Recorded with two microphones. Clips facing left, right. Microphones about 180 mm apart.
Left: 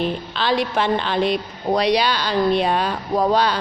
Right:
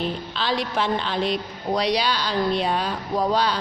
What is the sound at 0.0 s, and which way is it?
A woman's voice, 65° left (ahead or behind).